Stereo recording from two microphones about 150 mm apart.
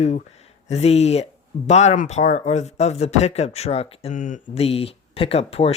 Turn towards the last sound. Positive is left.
turn(degrees=45)  # may be behind; listen again after turning